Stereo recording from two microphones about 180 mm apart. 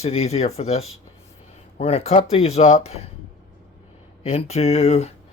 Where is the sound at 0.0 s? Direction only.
35° left (ahead or behind).